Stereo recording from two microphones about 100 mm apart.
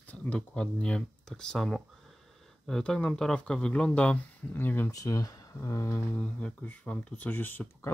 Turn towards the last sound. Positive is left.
turn(degrees=20)  # may be behind; listen again after turning